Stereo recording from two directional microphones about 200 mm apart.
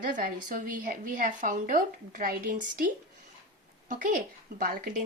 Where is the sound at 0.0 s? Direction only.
45° right (ahead or behind).